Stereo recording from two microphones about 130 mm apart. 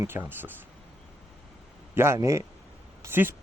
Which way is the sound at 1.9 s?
20° right (ahead or behind).